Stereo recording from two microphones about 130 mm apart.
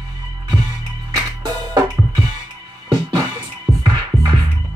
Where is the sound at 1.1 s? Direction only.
35° right (ahead or behind).